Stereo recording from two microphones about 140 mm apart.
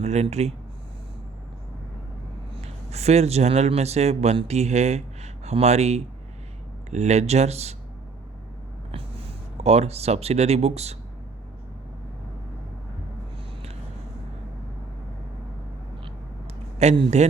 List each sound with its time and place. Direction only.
0.0 s speech: 50° right (ahead or behind)
2.6 s speech: 50° right (ahead or behind)
9.6 s speech: 50° right (ahead or behind)
16.7 s speech: 45° right (ahead or behind)